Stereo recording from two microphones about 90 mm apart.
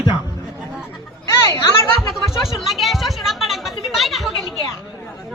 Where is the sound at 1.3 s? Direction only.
35° left (ahead or behind).